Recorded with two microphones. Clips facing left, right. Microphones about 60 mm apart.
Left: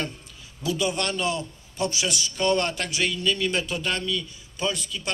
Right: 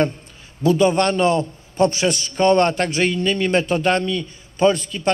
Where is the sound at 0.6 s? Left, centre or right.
Right.